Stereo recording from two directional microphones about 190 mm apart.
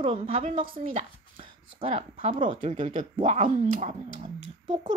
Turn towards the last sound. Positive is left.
turn(degrees=-35)  # may be behind; listen again after turning